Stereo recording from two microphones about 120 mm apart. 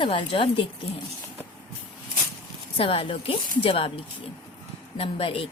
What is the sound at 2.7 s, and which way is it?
A woman's voice, 50° left (ahead or behind).